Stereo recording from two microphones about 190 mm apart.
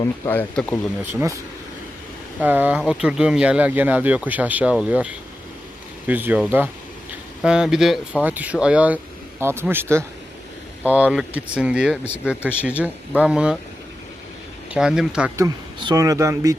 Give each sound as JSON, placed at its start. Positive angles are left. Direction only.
{"t": 0.0, "sound": "speech", "side_deg": 10}
{"t": 1.1, "sound": "speech", "side_deg": -15}
{"t": 2.4, "sound": "speech", "side_deg": -10}
{"t": 14.7, "sound": "speech", "side_deg": -5}
{"t": 15.4, "sound": "speech", "side_deg": -20}